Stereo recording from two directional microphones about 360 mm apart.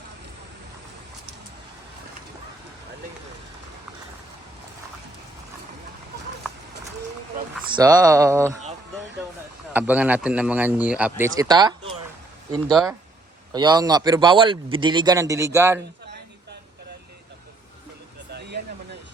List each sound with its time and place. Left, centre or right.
7.7 s a man's voice: centre
9.7 s a man's voice: centre
18.3 s vehicle: right